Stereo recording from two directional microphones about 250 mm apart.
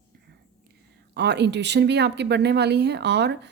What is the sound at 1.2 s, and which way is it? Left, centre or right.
Speech, right.